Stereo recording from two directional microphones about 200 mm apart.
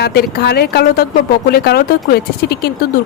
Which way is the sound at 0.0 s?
50° left (ahead or behind).